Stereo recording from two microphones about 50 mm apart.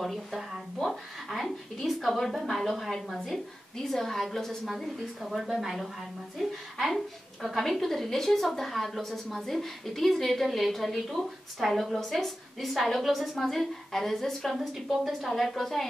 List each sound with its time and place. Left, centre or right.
0.0 s a woman's voice: centre
4.6 s a woman's voice: centre